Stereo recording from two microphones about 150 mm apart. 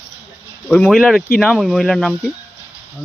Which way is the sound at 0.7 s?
5° left (ahead or behind).